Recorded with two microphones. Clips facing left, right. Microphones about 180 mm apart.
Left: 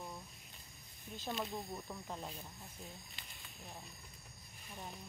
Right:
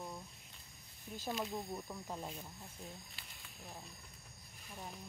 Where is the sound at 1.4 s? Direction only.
Centre (ahead or behind).